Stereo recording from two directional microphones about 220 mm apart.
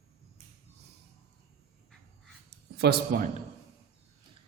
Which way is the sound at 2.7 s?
45° right (ahead or behind).